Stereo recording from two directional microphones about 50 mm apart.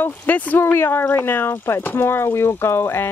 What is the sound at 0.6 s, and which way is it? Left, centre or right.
Speech, left.